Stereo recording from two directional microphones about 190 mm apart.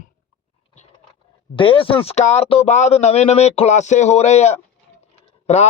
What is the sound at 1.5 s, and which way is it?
A man's voice, 30° left (ahead or behind).